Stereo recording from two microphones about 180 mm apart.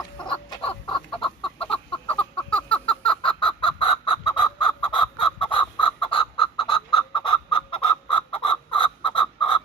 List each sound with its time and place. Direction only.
0.2 s chicken: 25° left (ahead or behind)
1.5 s a sound: 30° left (ahead or behind)
3.4 s chicken: 30° left (ahead or behind)